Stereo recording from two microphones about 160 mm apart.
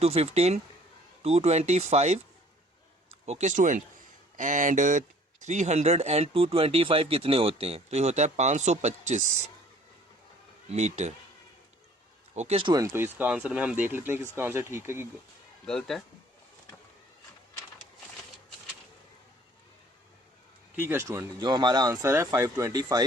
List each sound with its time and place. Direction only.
0.0 s speech: 40° right (ahead or behind)
3.2 s speech: 45° right (ahead or behind)
10.7 s speech: 45° right (ahead or behind)
12.3 s speech: 45° right (ahead or behind)
12.6 s speech: 25° right (ahead or behind)
12.9 s speech: 10° right (ahead or behind)
15.6 s speech: centre (ahead or behind)
20.7 s speech: 15° right (ahead or behind)